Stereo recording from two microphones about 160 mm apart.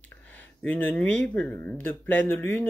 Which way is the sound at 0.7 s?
10° left (ahead or behind).